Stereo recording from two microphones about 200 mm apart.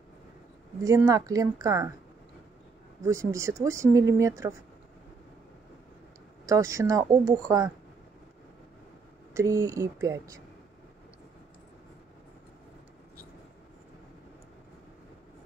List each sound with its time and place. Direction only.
0.8 s speech: 15° right (ahead or behind)
3.0 s speech: 15° right (ahead or behind)
6.4 s speech: 15° right (ahead or behind)
9.3 s speech: 15° right (ahead or behind)